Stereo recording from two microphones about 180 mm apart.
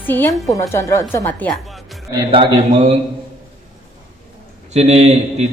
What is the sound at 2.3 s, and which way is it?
Speech, 35° right (ahead or behind).